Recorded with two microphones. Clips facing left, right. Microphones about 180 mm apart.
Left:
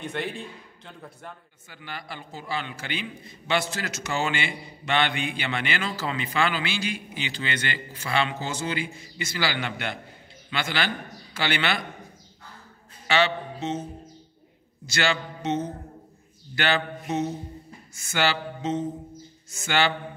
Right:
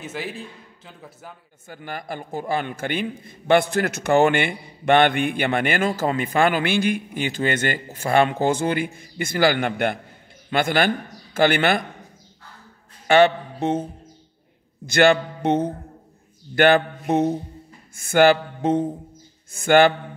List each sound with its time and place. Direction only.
0.0 s a man's voice: 5° right (ahead or behind)
1.7 s a man's voice: 45° right (ahead or behind)
13.0 s speech: 50° right (ahead or behind)
14.9 s a sound: 55° right (ahead or behind)
19.5 s a man's voice: 55° right (ahead or behind)